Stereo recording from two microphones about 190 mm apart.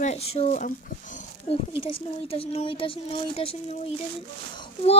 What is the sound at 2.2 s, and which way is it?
Speech, 30° left (ahead or behind).